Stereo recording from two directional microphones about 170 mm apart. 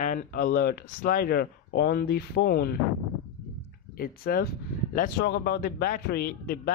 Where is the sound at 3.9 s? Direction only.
60° left (ahead or behind).